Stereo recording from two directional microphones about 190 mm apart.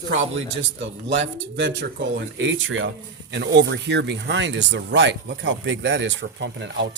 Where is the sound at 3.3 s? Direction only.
70° right (ahead or behind).